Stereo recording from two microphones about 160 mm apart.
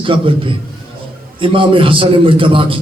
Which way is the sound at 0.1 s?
35° right (ahead or behind).